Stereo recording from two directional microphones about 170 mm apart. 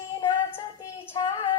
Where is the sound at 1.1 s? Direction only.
25° left (ahead or behind).